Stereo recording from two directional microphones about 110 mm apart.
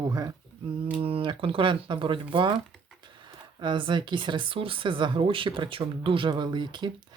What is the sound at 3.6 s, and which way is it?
Speech, 45° right (ahead or behind).